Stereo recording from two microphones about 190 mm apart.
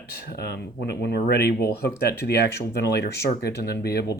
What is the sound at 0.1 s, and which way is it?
Speech, 55° left (ahead or behind).